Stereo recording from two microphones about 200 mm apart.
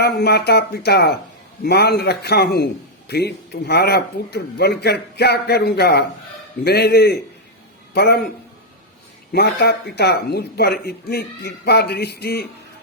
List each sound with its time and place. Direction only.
0.0 s speech: 55° left (ahead or behind)
9.3 s speech: 55° left (ahead or behind)